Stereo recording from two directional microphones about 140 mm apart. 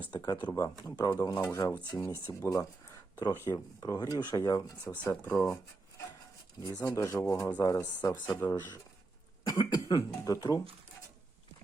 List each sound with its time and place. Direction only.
0.0 s speech: 30° left (ahead or behind)
4.8 s speech: 15° left (ahead or behind)
6.9 s speech: 20° left (ahead or behind)
9.5 s speech: 25° left (ahead or behind)